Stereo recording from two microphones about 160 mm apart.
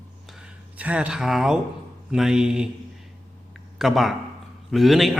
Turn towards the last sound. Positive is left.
turn(degrees=0)  # may be behind; listen again after turning